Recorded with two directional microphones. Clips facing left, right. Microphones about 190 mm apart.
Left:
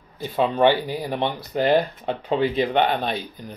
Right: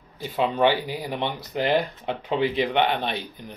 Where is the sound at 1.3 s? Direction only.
20° right (ahead or behind).